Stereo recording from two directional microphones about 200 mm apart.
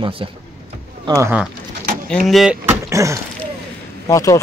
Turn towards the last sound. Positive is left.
turn(degrees=15)  # may be behind; listen again after turning